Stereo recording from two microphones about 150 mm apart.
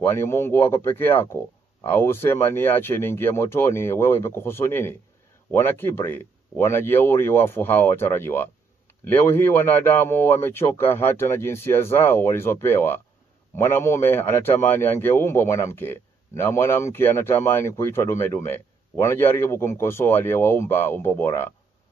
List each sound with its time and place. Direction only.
0.1 s speech: 15° left (ahead or behind)